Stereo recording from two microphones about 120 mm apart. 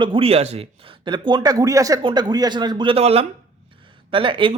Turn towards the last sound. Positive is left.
turn(degrees=-45)  # may be behind; listen again after turning